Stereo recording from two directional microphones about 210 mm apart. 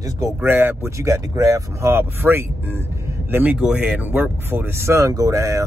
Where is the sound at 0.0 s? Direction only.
10° right (ahead or behind).